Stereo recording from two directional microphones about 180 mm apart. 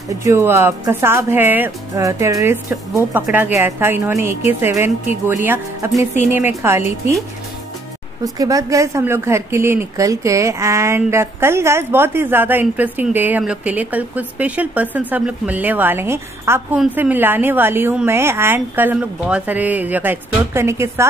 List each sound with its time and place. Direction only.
0.2 s speech: 15° right (ahead or behind)
8.2 s speech: 20° right (ahead or behind)